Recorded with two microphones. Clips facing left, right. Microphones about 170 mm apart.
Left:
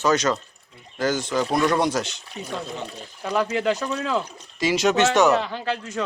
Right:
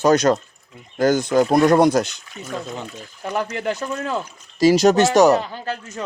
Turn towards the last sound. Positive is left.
turn(degrees=-40)  # may be behind; listen again after turning